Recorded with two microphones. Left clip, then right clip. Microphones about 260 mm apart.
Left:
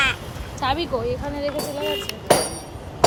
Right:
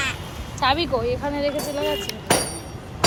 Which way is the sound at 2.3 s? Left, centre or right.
Left.